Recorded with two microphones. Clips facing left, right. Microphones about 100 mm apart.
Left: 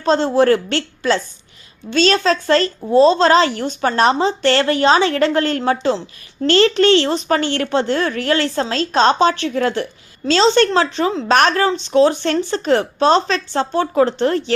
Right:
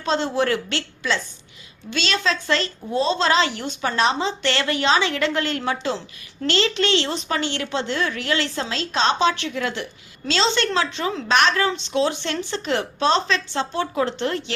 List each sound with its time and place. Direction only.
0.0 s a woman's voice: 40° left (ahead or behind)